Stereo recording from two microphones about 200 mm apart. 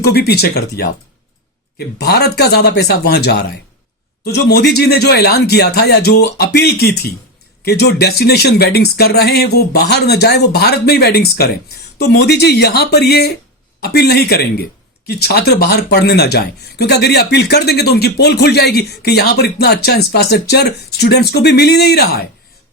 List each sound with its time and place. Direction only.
0.0 s speech: 55° left (ahead or behind)